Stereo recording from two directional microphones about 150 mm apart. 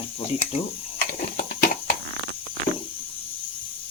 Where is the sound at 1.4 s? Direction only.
65° left (ahead or behind).